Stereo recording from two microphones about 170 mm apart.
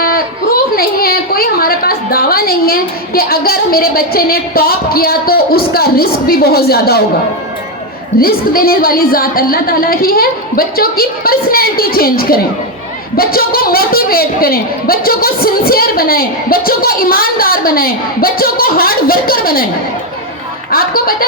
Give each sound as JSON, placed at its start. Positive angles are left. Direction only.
{"t": 0.0, "sound": "speech", "side_deg": 60}
{"t": 8.2, "sound": "speech", "side_deg": 60}
{"t": 20.7, "sound": "speech", "side_deg": 60}